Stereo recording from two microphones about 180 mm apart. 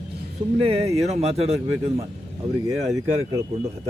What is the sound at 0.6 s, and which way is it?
A man's voice, 35° right (ahead or behind).